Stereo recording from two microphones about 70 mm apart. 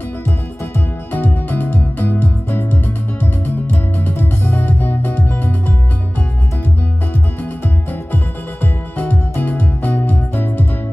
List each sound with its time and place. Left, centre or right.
0.7 s music: left
7.6 s music: left